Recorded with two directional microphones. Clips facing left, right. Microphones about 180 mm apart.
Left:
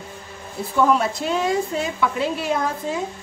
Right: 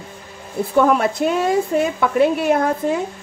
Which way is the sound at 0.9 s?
60° right (ahead or behind).